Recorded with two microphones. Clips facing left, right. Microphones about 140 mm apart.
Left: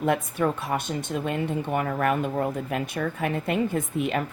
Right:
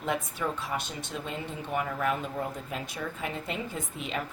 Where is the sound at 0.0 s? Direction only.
55° left (ahead or behind).